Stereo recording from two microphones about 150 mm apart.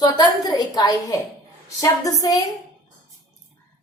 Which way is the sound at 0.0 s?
25° left (ahead or behind).